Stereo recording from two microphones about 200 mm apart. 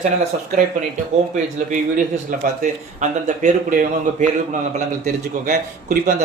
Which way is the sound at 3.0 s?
40° right (ahead or behind).